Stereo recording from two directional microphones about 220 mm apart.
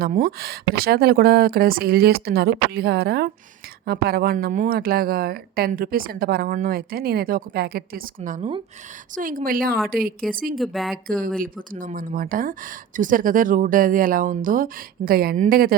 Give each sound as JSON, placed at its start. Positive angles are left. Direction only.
{"t": 0.0, "sound": "speech", "side_deg": -40}
{"t": 10.6, "sound": "speech", "side_deg": 0}
{"t": 10.9, "sound": "speech", "side_deg": -40}